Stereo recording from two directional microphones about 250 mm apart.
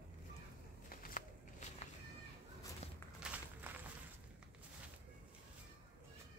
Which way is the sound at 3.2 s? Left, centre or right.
Centre.